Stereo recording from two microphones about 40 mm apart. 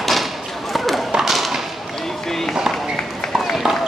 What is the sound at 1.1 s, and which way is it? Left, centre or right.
Tap, centre.